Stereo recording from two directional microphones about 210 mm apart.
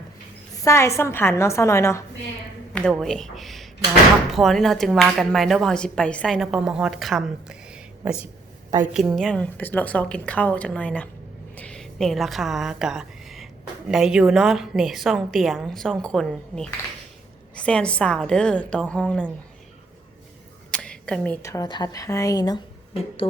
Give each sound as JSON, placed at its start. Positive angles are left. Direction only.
{"t": 0.6, "sound": "a woman's voice", "side_deg": 15}
{"t": 2.9, "sound": "a woman's voice", "side_deg": 0}
{"t": 20.7, "sound": "a woman's voice", "side_deg": 5}
{"t": 23.2, "sound": "a sound", "side_deg": 25}